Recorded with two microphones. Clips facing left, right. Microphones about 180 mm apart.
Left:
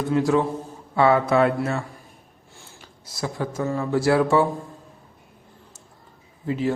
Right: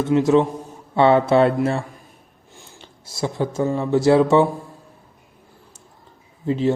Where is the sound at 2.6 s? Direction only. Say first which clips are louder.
Right 3 dB; 25° right (ahead or behind).